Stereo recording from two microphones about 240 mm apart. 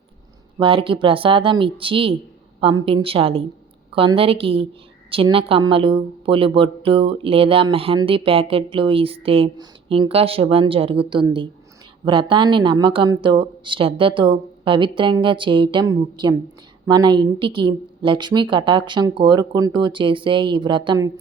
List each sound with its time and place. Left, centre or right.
0.6 s a woman's voice: right